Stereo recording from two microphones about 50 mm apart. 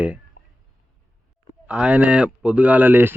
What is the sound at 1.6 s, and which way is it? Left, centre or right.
Speech, right.